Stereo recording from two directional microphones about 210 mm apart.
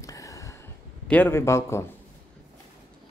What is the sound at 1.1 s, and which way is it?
Speech, 10° left (ahead or behind).